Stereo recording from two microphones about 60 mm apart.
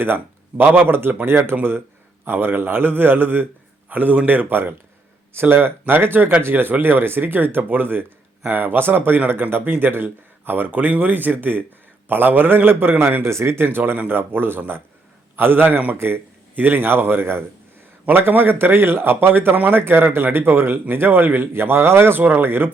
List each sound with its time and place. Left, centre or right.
0.5 s a man's voice: right
13.2 s speech: right